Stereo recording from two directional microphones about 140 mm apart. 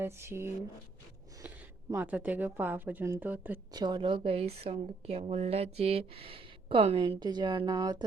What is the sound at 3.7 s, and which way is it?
A woman's voice, 30° right (ahead or behind).